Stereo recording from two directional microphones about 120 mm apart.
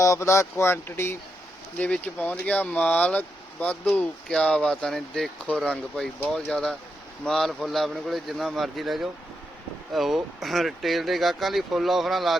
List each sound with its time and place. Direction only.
0.0 s speech: 25° left (ahead or behind); by 12.4 s centre (ahead or behind)